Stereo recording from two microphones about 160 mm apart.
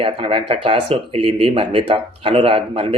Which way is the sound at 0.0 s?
35° right (ahead or behind).